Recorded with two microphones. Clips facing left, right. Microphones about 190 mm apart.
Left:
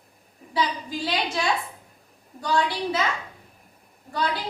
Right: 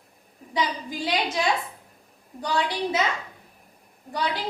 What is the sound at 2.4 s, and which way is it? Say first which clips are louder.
Speech: left 1 dB; 20° right (ahead or behind).